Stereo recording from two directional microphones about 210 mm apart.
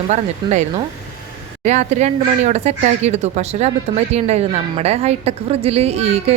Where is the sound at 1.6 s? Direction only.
35° right (ahead or behind).